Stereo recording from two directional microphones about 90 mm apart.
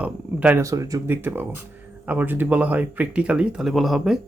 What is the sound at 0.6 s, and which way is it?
Speech, 35° right (ahead or behind).